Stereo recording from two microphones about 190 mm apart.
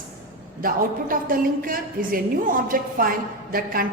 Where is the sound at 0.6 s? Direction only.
45° right (ahead or behind).